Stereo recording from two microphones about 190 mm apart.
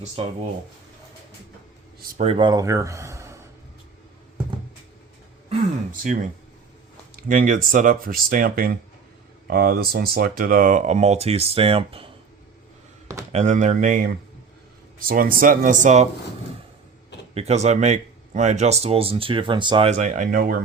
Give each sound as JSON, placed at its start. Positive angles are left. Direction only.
{"t": 2.0, "sound": "speech", "side_deg": -50}
{"t": 2.2, "sound": "speech", "side_deg": -25}
{"t": 6.0, "sound": "speech", "side_deg": -45}
{"t": 13.3, "sound": "speech", "side_deg": -40}
{"t": 17.3, "sound": "speech", "side_deg": -35}
{"t": 19.9, "sound": "speech", "side_deg": -40}